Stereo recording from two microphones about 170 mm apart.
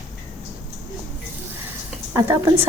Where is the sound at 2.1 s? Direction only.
15° right (ahead or behind).